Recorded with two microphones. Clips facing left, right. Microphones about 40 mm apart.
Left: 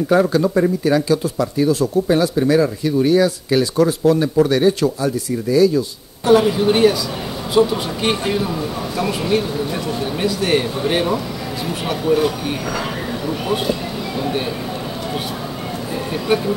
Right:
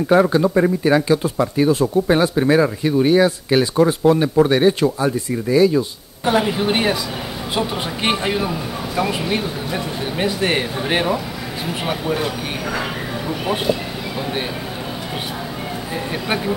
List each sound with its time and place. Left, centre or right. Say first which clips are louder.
0.1 s speech: right 1 dB; right
15.9 s speech: left 4 dB; centre